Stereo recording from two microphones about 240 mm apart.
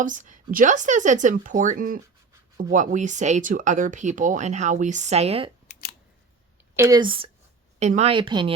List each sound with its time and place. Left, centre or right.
0.0 s speech: right
5.7 s scissors: left
6.7 s a woman's voice: centre